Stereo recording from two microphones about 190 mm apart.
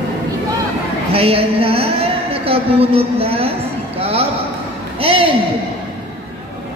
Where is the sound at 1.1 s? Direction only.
30° right (ahead or behind).